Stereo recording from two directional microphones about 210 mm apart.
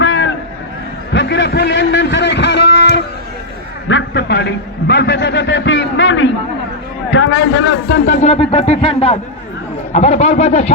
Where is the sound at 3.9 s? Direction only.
55° left (ahead or behind).